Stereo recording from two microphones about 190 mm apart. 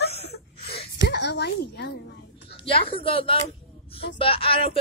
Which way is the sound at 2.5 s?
30° left (ahead or behind).